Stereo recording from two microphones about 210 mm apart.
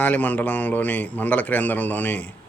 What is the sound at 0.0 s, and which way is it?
Speech, 10° left (ahead or behind).